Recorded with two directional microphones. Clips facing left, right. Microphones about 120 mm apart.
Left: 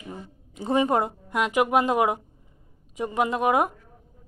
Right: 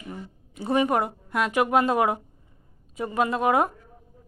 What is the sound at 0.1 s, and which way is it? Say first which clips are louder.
A woman's voice: right 1 dB; 20° left (ahead or behind).